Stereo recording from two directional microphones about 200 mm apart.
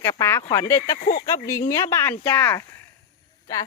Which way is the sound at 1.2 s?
15° left (ahead or behind).